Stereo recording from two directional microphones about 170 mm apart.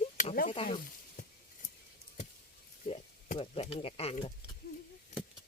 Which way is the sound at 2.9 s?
35° left (ahead or behind).